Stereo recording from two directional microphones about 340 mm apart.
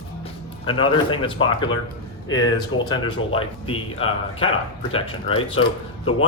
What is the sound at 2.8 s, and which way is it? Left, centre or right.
Speech, centre.